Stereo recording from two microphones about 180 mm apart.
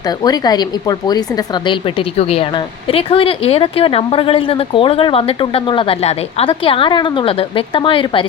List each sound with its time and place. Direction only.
0.2 s a woman's voice: 20° left (ahead or behind)